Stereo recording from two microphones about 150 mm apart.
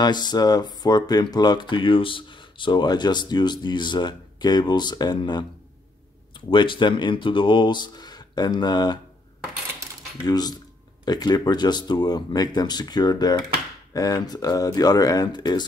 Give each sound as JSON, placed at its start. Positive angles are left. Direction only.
{"t": 0.0, "sound": "speech", "side_deg": 30}
{"t": 10.2, "sound": "speech", "side_deg": 25}